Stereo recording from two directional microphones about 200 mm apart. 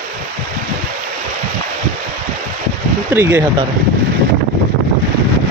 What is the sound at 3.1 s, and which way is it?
Speech, 10° right (ahead or behind).